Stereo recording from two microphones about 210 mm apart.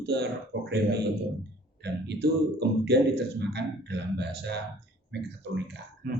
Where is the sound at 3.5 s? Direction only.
55° right (ahead or behind).